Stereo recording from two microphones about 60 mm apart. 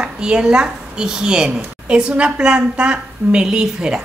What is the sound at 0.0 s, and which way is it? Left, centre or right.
A woman's voice, centre.